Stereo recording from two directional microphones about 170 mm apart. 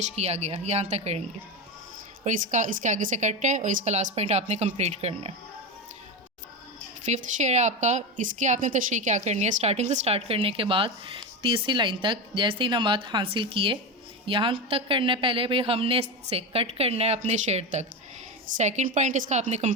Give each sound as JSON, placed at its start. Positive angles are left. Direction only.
{"t": 0.0, "sound": "a woman's voice", "side_deg": -40}
{"t": 2.2, "sound": "a woman's voice", "side_deg": -50}
{"t": 7.0, "sound": "a woman's voice", "side_deg": -45}